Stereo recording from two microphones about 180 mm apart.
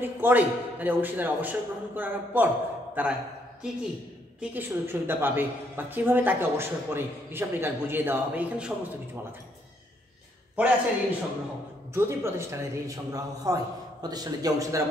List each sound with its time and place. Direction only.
0.0 s a woman's voice: 10° right (ahead or behind)
4.4 s a woman's voice: 10° right (ahead or behind)
10.5 s a woman's voice: 10° right (ahead or behind)